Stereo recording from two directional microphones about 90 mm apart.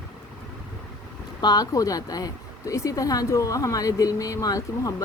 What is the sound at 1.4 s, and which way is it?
Speech, 45° left (ahead or behind).